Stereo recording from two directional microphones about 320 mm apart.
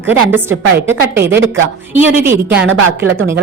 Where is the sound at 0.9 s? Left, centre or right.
Centre.